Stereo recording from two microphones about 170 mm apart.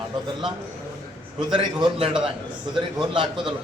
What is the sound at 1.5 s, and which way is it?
A man's voice, 30° right (ahead or behind).